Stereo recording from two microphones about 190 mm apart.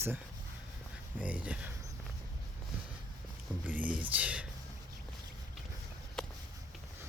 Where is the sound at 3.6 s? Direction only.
10° right (ahead or behind).